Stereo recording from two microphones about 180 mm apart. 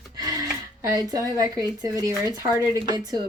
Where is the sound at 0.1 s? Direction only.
20° right (ahead or behind).